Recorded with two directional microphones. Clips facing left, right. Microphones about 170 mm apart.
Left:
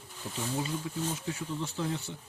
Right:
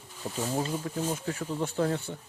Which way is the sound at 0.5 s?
50° right (ahead or behind).